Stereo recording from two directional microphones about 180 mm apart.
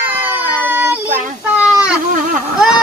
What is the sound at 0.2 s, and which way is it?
Baby cry, 10° right (ahead or behind).